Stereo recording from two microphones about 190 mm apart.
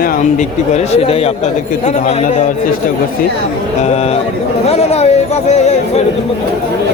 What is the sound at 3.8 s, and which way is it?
Speech, 35° left (ahead or behind).